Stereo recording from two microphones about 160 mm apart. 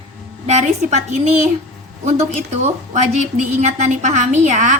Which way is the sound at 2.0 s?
45° right (ahead or behind).